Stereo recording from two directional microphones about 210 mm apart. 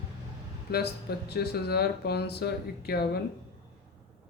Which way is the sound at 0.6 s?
50° left (ahead or behind).